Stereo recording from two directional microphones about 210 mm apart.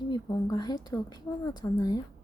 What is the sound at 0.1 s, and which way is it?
A woman's voice, 20° left (ahead or behind).